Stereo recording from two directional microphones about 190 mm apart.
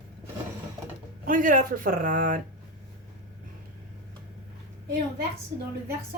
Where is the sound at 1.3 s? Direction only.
45° right (ahead or behind).